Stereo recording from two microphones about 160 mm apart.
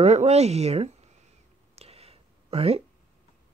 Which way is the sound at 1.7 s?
40° right (ahead or behind).